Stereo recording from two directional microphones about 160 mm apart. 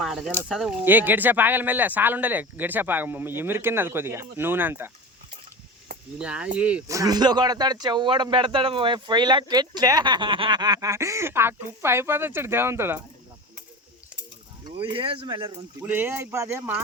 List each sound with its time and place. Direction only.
0.0 s speech: centre (ahead or behind)
6.1 s speech: 5° right (ahead or behind)
6.8 s speech: 20° right (ahead or behind)
14.6 s speech: 30° right (ahead or behind)
15.8 s speech: 15° right (ahead or behind)